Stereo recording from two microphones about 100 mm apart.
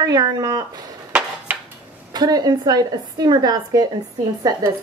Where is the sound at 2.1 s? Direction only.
40° right (ahead or behind).